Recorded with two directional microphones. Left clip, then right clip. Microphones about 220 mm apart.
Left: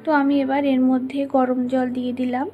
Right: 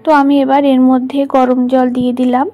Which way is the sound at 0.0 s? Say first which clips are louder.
Right 10 dB; 30° right (ahead or behind).